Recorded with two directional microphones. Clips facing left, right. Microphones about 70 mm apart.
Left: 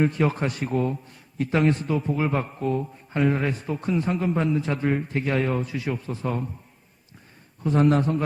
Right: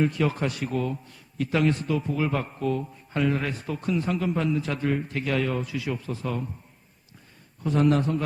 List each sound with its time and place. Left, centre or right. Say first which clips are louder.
0.0 s a man's voice: left 2 dB; left
7.6 s a man's voice: left 2 dB; left